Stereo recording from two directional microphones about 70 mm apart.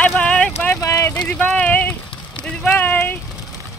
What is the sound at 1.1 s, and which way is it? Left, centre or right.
Speech, left.